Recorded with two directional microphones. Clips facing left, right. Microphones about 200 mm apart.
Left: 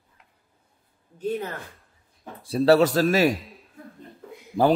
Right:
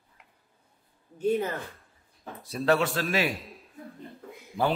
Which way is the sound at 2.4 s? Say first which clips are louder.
Left 7 dB; 30° left (ahead or behind).